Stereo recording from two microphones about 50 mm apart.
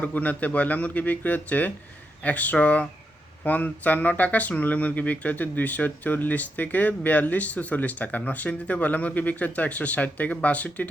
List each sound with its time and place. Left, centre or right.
0.0 s speech: left